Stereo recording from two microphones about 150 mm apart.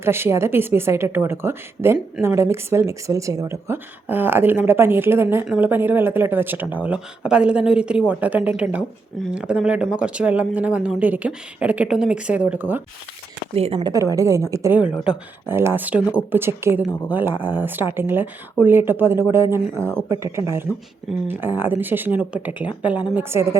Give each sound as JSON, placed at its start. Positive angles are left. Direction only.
{"t": 0.0, "sound": "speech", "side_deg": -15}
{"t": 13.5, "sound": "speech", "side_deg": -40}
{"t": 13.9, "sound": "a woman's voice", "side_deg": -20}
{"t": 15.1, "sound": "a woman's voice", "side_deg": -5}